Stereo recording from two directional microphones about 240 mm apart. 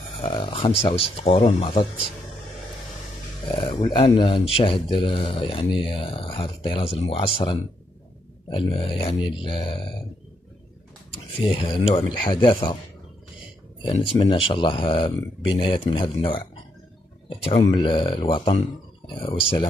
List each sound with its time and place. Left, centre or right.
0.2 s speech: left
3.5 s speech: left
11.4 s speech: left
13.8 s speech: left